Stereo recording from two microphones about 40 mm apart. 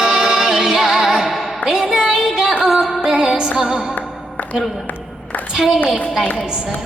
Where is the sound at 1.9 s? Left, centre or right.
Centre.